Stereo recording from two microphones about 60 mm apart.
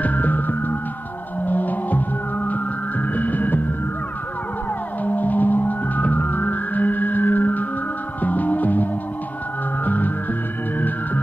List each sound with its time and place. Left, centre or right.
0.0 s music: left
5.0 s theremin: left
8.2 s music: left
9.8 s music: left